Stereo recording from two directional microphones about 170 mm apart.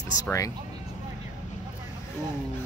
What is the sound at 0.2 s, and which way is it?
Speech, 20° left (ahead or behind).